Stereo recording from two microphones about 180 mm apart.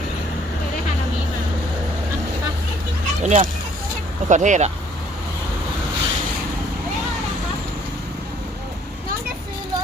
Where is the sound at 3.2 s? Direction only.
40° right (ahead or behind).